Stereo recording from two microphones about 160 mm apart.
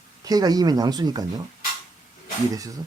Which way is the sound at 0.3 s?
25° right (ahead or behind).